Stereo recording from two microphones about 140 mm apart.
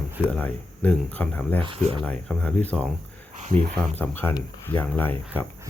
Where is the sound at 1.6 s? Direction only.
40° right (ahead or behind).